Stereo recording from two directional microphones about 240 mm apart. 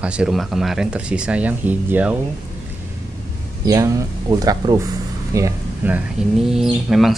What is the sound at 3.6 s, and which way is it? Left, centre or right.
Speech, centre.